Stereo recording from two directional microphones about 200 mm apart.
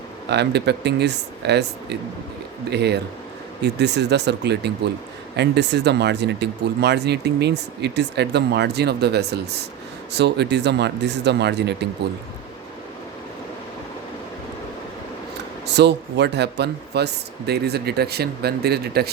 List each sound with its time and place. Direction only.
0.3 s speech: 55° right (ahead or behind)
15.6 s speech: 60° right (ahead or behind)